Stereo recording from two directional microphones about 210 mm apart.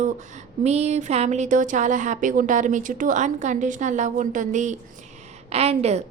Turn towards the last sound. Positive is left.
turn(degrees=-30)  # may be behind; listen again after turning